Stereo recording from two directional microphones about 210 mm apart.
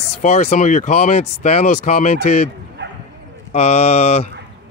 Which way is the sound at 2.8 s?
55° right (ahead or behind).